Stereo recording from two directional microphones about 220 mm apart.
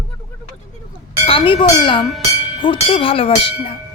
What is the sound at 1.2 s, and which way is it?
Speech, 25° left (ahead or behind).